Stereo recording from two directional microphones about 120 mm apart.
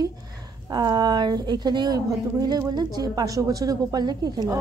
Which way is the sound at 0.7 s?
35° right (ahead or behind).